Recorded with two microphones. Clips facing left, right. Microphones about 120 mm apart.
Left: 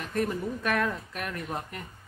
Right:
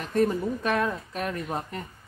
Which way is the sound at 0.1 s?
25° right (ahead or behind).